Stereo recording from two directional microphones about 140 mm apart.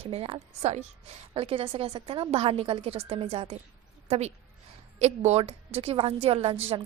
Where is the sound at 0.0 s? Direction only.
45° right (ahead or behind).